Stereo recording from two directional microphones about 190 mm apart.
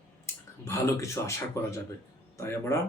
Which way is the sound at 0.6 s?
15° left (ahead or behind).